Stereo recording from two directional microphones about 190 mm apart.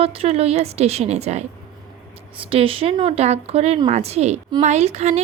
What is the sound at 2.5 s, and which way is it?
Speech, 30° right (ahead or behind).